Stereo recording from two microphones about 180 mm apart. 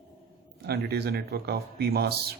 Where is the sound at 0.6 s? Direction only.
60° right (ahead or behind).